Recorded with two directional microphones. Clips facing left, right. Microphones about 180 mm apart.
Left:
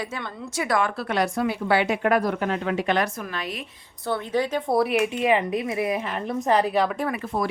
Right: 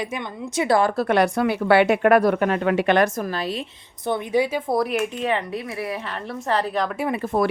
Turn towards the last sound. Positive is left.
turn(degrees=-60)  # may be behind; listen again after turning